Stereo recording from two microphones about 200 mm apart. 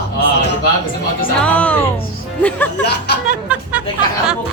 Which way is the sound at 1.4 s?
5° left (ahead or behind).